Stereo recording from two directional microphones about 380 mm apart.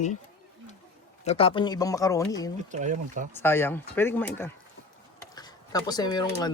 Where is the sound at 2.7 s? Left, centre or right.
Centre.